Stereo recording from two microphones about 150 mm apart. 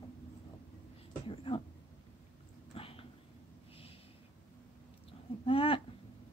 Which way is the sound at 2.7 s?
40° left (ahead or behind).